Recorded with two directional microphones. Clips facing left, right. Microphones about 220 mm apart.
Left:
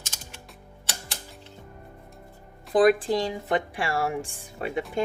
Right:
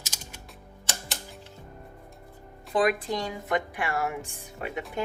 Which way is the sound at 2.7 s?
35° left (ahead or behind).